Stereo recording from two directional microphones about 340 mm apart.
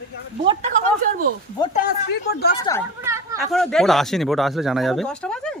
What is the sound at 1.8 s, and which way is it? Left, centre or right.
Speech, left.